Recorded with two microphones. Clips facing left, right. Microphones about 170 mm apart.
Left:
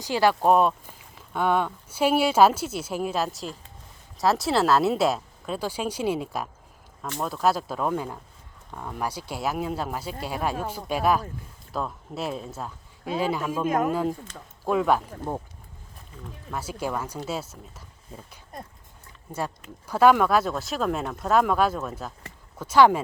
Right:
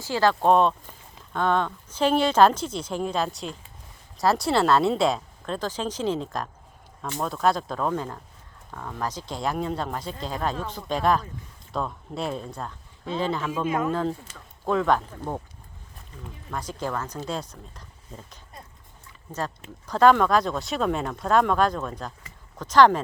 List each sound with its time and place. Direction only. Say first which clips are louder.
0.0 s speech: even; 15° left (ahead or behind)
13.7 s speech: left 2 dB; 45° left (ahead or behind)
13.9 s speech: left 1 dB; 10° left (ahead or behind)
16.5 s speech: even; 5° left (ahead or behind)
19.9 s speech: even; 10° left (ahead or behind)